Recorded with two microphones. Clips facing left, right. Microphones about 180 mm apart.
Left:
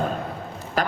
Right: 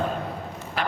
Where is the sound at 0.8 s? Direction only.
40° left (ahead or behind).